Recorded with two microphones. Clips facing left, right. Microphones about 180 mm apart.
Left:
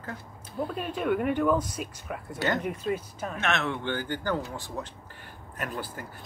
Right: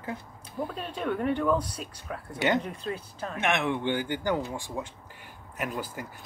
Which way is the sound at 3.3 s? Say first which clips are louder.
Right 2 dB; 15° right (ahead or behind).